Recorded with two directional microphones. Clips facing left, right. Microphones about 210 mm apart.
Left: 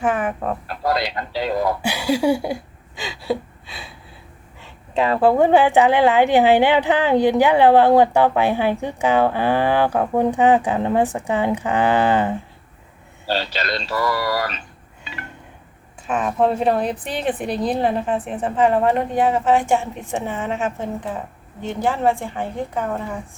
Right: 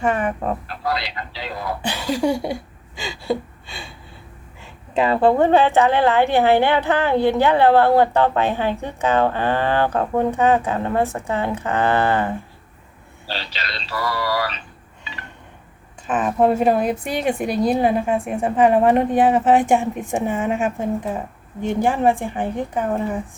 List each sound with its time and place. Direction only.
0.0 s speech: centre (ahead or behind)
0.7 s a man's voice: 45° left (ahead or behind)
1.8 s a sound: 10° left (ahead or behind)
4.6 s a woman's voice: centre (ahead or behind); by 12.3 s 15° left (ahead or behind)
13.2 s speech: 45° left (ahead or behind)
16.0 s a woman's voice: 5° right (ahead or behind)